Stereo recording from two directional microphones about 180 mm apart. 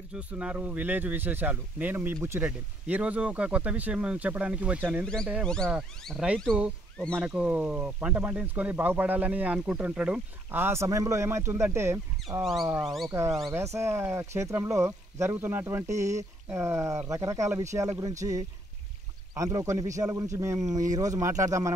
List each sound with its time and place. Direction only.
0.1 s speech: 5° right (ahead or behind)
5.4 s speech: 5° left (ahead or behind); by 21.7 s 15° right (ahead or behind)